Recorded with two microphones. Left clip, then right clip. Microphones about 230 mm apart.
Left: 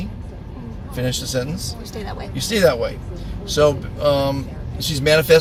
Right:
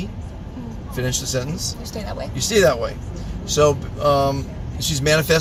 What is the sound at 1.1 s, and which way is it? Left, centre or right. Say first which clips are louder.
Speech: left 1 dB; left.